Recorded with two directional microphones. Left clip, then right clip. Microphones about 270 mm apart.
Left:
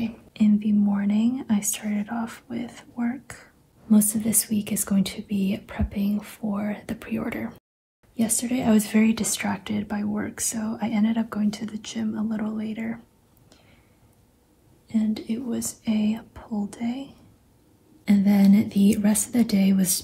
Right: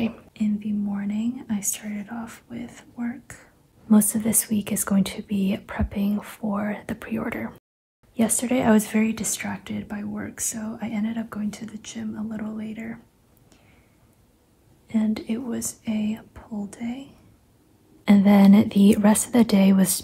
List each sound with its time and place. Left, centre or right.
0.3 s speech: centre
3.9 s speech: centre
14.9 s speech: centre
18.0 s speech: right